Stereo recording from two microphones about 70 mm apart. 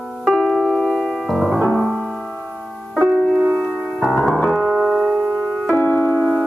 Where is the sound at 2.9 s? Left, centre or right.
Centre.